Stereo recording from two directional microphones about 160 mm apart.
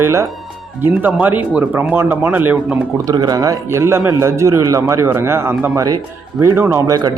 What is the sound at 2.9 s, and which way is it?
Speech, 25° right (ahead or behind).